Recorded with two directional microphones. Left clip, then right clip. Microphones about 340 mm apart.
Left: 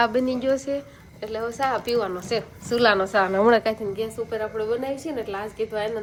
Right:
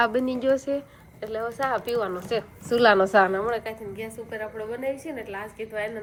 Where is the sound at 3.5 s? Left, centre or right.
Left.